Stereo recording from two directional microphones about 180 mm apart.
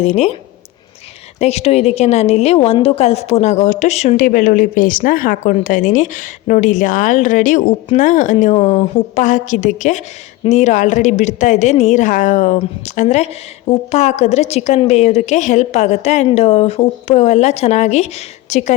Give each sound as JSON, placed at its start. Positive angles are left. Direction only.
{"t": 0.0, "sound": "a woman's voice", "side_deg": 40}
{"t": 1.4, "sound": "a woman's voice", "side_deg": 35}